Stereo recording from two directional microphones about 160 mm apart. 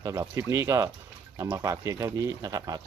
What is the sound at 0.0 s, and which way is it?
Speech, 20° right (ahead or behind).